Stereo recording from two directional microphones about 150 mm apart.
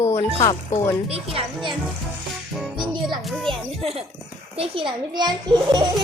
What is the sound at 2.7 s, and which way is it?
Music, 30° right (ahead or behind).